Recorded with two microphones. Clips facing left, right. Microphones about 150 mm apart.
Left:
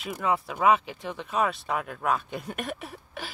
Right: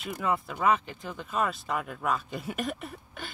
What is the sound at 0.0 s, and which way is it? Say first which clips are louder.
Speech: left 2 dB; centre (ahead or behind).